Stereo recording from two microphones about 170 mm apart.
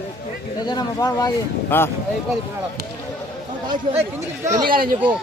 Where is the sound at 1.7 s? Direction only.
10° left (ahead or behind).